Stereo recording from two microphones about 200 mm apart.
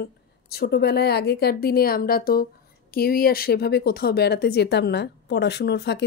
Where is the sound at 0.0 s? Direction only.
55° left (ahead or behind).